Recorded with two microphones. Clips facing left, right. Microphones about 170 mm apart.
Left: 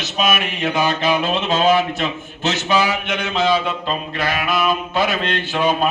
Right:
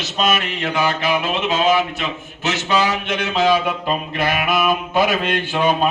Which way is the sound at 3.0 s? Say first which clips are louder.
Right 1 dB; 5° right (ahead or behind).